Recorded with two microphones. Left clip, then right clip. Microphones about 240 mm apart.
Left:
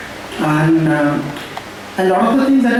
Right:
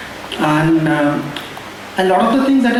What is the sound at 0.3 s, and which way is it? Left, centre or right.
A man's voice, centre.